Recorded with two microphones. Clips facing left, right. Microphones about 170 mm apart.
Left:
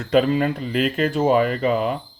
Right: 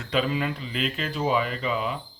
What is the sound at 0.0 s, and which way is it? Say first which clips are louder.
Speech: left 8 dB; 45° left (ahead or behind).